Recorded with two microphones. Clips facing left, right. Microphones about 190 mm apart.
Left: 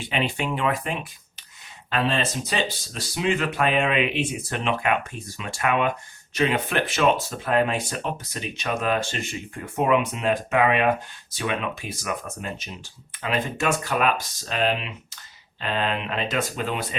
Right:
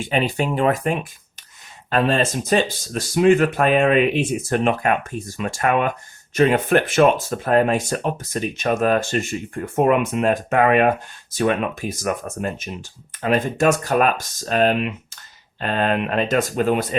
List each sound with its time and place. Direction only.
0.0 s speech: 40° right (ahead or behind)